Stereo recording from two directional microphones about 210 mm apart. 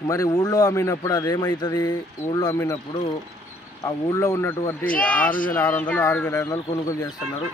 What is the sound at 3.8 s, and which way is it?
Speech, 15° left (ahead or behind).